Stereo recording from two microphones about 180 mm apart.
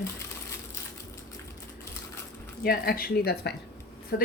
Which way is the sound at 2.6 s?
55° left (ahead or behind).